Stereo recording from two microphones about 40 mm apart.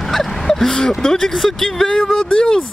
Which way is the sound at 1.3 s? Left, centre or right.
Centre.